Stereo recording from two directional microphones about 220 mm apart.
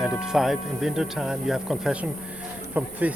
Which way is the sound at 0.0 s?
Centre (ahead or behind).